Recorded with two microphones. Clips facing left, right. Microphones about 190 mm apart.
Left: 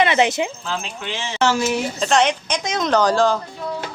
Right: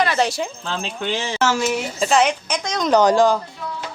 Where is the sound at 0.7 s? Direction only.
35° right (ahead or behind).